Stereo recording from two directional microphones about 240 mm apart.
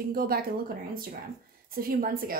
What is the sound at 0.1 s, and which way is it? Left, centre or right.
Speech, right.